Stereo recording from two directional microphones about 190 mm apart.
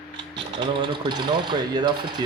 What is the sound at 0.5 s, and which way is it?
Speech, 25° right (ahead or behind).